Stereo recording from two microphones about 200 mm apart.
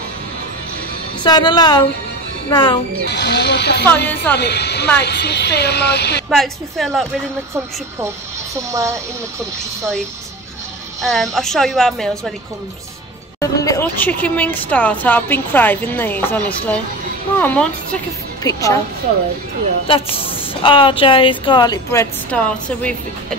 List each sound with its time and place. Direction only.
1.2 s a woman's voice: 20° left (ahead or behind)
3.1 s speech: 55° left (ahead or behind)
4.1 s speech: 10° left (ahead or behind)
4.4 s speech: 55° left (ahead or behind)
6.3 s a woman's voice: centre (ahead or behind)
8.5 s speech: 15° right (ahead or behind)
11.1 s a woman's voice: centre (ahead or behind)
13.4 s speech: 15° left (ahead or behind)
19.9 s a woman's voice: 30° left (ahead or behind)
22.3 s speech: 5° left (ahead or behind)